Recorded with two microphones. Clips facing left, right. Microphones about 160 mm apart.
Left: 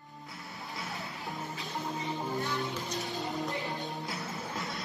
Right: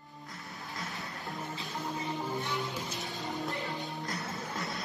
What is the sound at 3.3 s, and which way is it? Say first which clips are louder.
Music: right 2 dB; 20° left (ahead or behind).